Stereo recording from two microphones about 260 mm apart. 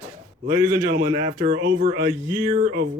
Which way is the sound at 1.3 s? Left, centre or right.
Right.